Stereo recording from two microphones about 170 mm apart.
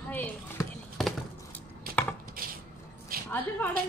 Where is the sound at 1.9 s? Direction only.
60° right (ahead or behind).